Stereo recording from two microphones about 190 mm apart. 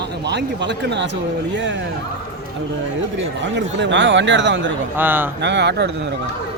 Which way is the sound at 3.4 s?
70° right (ahead or behind).